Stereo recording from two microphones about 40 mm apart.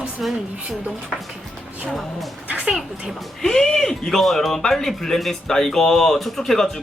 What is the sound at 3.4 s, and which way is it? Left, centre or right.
Speech, centre.